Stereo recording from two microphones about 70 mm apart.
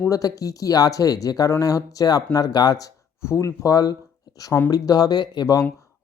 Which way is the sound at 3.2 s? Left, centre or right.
Left.